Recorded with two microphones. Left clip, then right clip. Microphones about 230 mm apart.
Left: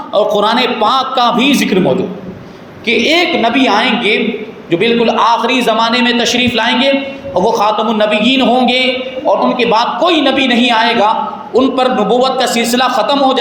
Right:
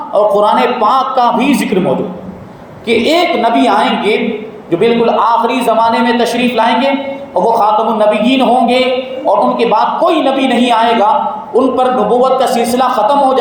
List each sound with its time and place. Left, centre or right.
0.1 s a man's voice: left
2.8 s a woman's voice: centre